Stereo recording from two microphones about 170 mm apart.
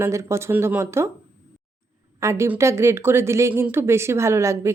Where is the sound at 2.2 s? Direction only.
15° right (ahead or behind).